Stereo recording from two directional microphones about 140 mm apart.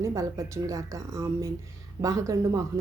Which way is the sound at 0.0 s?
25° right (ahead or behind).